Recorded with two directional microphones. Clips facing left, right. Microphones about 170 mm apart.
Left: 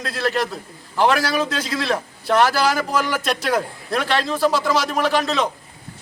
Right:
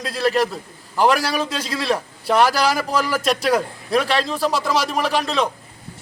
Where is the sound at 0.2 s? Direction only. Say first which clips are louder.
Right 3 dB; 5° right (ahead or behind).